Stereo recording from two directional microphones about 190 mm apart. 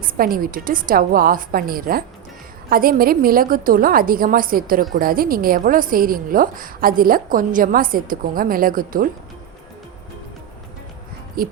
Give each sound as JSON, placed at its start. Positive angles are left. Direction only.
{"t": 0.0, "sound": "a woman's voice", "side_deg": -50}
{"t": 11.4, "sound": "a woman's voice", "side_deg": -50}